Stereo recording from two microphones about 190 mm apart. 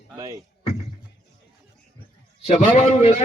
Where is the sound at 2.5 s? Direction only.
35° left (ahead or behind).